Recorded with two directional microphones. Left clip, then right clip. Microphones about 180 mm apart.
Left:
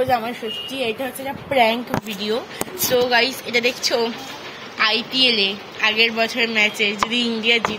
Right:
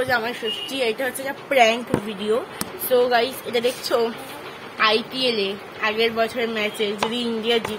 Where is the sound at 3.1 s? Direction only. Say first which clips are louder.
Left 3 dB; 25° right (ahead or behind).